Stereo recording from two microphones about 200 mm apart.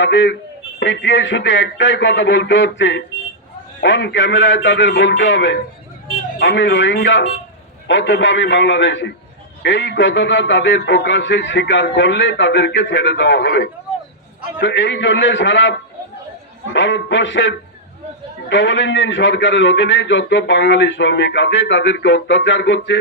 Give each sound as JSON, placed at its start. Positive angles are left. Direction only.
{"t": 0.0, "sound": "a man's voice", "side_deg": 65}
{"t": 16.7, "sound": "a man's voice", "side_deg": 65}